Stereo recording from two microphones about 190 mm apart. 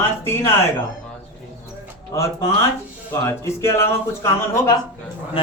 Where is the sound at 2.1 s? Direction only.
15° left (ahead or behind).